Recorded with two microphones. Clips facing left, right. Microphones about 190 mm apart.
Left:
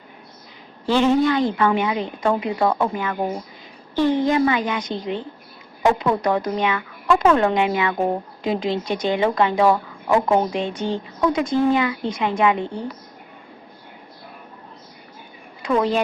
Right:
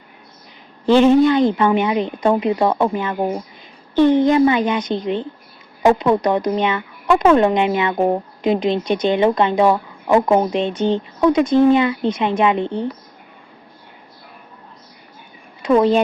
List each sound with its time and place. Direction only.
0.9 s speech: 20° right (ahead or behind)
15.6 s speech: 20° right (ahead or behind)